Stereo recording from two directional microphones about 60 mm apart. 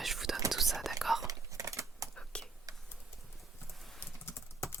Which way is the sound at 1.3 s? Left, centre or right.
Right.